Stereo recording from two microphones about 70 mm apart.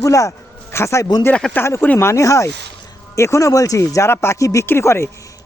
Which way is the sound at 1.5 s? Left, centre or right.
Left.